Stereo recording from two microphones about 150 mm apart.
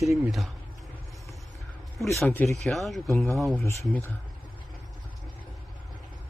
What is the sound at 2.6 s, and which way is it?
Speech, centre (ahead or behind).